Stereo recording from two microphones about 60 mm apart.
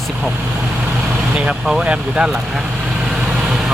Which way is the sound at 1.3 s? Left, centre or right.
Centre.